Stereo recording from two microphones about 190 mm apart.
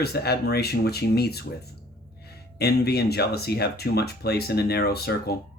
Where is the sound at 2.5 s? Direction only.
55° left (ahead or behind).